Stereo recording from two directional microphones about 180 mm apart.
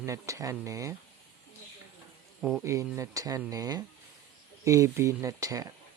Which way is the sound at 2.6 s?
15° right (ahead or behind).